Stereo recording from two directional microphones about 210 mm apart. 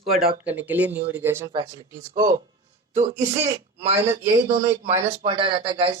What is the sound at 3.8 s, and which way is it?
Speech, 30° right (ahead or behind).